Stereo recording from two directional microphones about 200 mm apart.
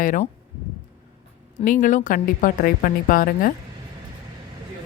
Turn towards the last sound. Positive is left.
turn(degrees=45)  # may be behind; listen again after turning